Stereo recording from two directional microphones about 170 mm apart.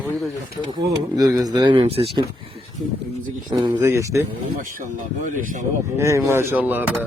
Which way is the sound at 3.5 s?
25° right (ahead or behind).